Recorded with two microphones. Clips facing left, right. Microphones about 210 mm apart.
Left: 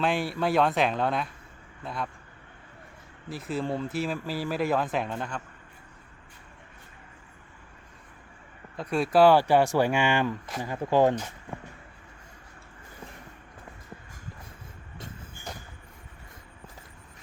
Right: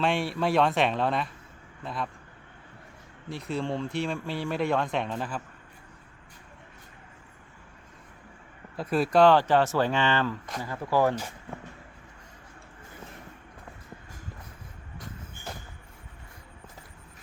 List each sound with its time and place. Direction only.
0.0 s speech: centre (ahead or behind)
3.2 s speech: centre (ahead or behind)
8.7 s speech: centre (ahead or behind); by 11.2 s 20° left (ahead or behind)